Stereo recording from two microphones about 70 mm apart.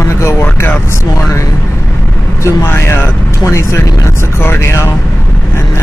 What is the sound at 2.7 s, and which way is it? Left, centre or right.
Speech, left.